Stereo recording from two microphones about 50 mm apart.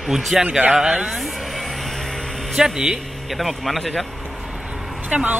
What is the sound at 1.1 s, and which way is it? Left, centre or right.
Speech, centre.